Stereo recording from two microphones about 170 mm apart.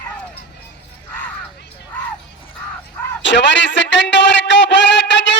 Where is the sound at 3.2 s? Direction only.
90° left.